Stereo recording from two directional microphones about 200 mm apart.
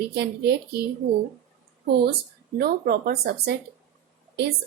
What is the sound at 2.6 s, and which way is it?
Speech, 50° right (ahead or behind).